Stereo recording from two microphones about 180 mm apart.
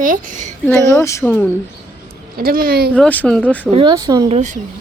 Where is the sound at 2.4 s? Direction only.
55° right (ahead or behind).